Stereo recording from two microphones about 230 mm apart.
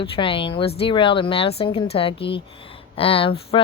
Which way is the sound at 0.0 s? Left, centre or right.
Left.